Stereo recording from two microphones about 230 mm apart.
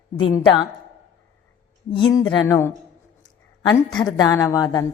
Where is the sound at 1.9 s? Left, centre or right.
Centre.